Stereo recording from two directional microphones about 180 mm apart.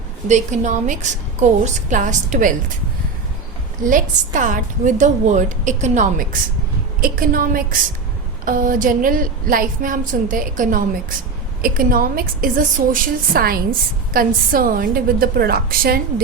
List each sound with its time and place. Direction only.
0.3 s a woman's voice: 40° right (ahead or behind)
3.8 s a woman's voice: 45° right (ahead or behind)